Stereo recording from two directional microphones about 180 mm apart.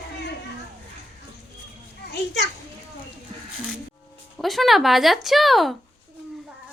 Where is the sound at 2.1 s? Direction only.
70° left (ahead or behind).